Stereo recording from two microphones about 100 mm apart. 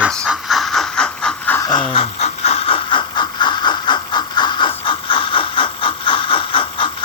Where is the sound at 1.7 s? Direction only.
55° left (ahead or behind).